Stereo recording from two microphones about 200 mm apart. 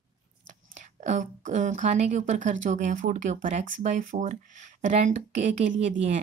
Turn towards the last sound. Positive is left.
turn(degrees=-35)  # may be behind; listen again after turning